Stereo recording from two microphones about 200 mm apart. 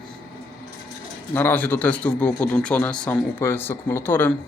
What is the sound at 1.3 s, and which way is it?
Speech, 10° left (ahead or behind).